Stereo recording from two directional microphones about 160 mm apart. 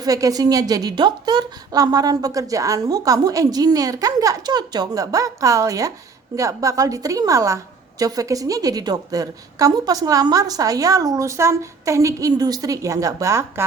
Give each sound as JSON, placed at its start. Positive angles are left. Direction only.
{"t": 0.0, "sound": "a woman's voice", "side_deg": -20}